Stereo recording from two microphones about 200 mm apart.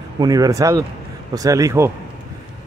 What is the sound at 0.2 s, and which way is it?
Speech, 20° right (ahead or behind).